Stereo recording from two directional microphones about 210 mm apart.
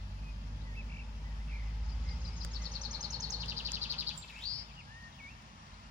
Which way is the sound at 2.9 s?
20° right (ahead or behind).